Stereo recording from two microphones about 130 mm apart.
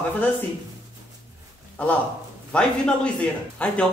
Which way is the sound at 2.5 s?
10° left (ahead or behind).